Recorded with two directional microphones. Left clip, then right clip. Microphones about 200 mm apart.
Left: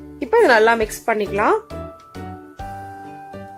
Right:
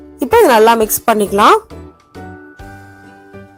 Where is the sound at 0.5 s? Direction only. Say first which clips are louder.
Right 6 dB; 20° right (ahead or behind).